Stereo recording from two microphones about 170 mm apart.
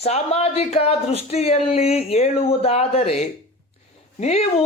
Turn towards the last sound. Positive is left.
turn(degrees=40)  # may be behind; listen again after turning